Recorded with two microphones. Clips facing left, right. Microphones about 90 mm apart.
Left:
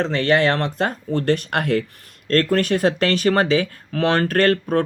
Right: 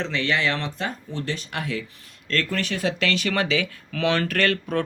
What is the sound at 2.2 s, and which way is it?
Speech, 45° left (ahead or behind).